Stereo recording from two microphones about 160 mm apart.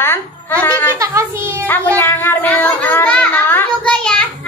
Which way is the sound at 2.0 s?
15° left (ahead or behind).